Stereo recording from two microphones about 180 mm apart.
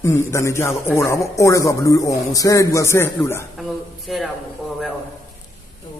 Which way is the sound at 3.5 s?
Centre (ahead or behind).